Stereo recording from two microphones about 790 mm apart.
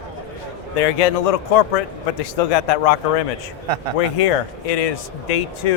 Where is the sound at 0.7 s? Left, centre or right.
Left.